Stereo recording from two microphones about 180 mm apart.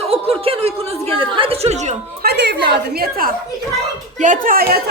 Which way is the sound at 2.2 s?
65° right (ahead or behind).